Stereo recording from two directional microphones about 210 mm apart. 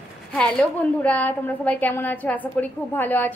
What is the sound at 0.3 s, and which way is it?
A woman's voice, 5° left (ahead or behind).